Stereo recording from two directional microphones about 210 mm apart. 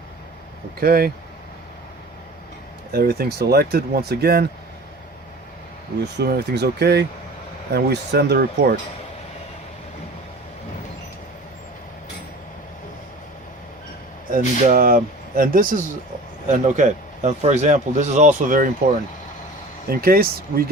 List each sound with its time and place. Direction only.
0.8 s speech: 45° right (ahead or behind)
2.9 s speech: 50° right (ahead or behind)
6.1 s speech: 50° right (ahead or behind)
14.3 s speech: 40° right (ahead or behind)
19.9 s speech: 45° right (ahead or behind)